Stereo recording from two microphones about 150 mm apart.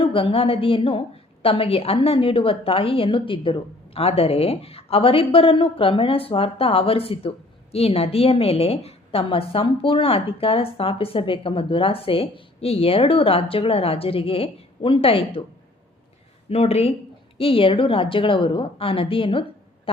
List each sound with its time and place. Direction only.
0.0 s a woman's voice: 35° left (ahead or behind)
16.5 s a woman's voice: 45° left (ahead or behind)